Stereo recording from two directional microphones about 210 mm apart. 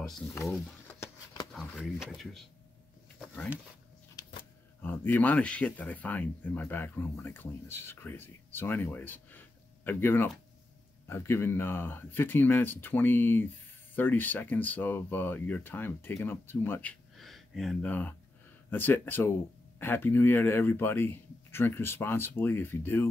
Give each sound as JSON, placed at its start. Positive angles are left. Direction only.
{"t": 0.9, "sound": "a sound", "side_deg": 10}
{"t": 3.2, "sound": "speech", "side_deg": 0}
{"t": 4.2, "sound": "vehicle", "side_deg": 20}
{"t": 4.8, "sound": "speech", "side_deg": 10}